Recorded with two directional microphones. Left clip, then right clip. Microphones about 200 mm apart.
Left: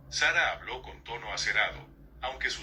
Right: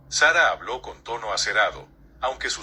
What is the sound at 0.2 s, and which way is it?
A man's voice, 30° right (ahead or behind).